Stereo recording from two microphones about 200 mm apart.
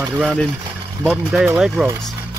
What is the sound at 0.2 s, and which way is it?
A man's voice, 5° left (ahead or behind).